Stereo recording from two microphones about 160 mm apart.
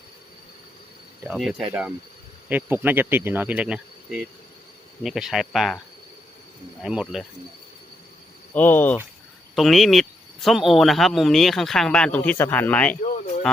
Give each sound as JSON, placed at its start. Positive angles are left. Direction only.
{"t": 1.2, "sound": "speech", "side_deg": 0}
{"t": 5.0, "sound": "speech", "side_deg": 0}
{"t": 6.8, "sound": "speech", "side_deg": -5}
{"t": 8.5, "sound": "speech", "side_deg": 10}
{"t": 9.6, "sound": "speech", "side_deg": 0}